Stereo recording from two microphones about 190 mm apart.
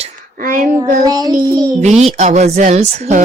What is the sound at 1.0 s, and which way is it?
Child singing, 20° right (ahead or behind).